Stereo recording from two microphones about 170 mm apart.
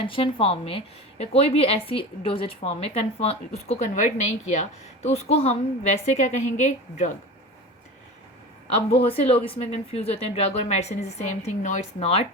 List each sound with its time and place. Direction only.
0.0 s a woman's voice: 30° left (ahead or behind)
8.9 s speech: 35° left (ahead or behind)